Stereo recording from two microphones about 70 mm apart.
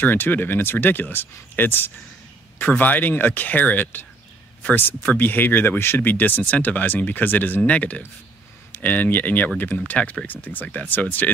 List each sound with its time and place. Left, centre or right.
0.0 s speech: left